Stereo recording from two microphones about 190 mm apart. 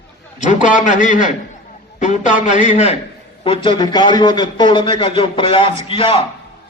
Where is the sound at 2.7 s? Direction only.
35° left (ahead or behind).